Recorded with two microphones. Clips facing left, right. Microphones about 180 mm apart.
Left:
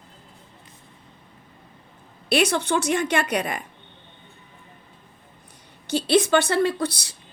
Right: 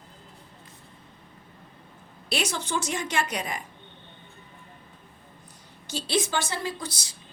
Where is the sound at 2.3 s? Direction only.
60° left (ahead or behind).